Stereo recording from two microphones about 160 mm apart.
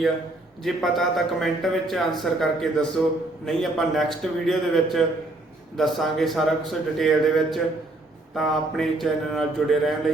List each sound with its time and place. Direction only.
0.6 s a man's voice: centre (ahead or behind)